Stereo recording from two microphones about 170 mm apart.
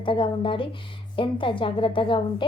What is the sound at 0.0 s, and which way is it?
A woman's voice, 30° left (ahead or behind).